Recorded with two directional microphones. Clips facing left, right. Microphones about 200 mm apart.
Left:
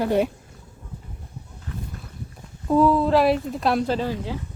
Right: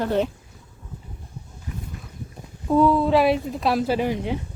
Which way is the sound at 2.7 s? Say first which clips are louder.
Even; centre (ahead or behind).